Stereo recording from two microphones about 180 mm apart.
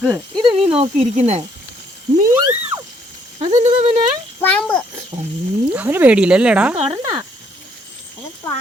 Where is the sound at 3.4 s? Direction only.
40° right (ahead or behind).